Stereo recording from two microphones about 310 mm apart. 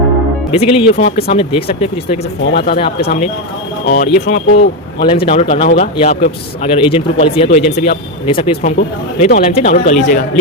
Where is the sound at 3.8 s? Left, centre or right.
Left.